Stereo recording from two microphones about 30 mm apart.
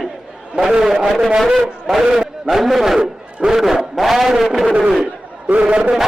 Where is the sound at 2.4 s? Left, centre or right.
Centre.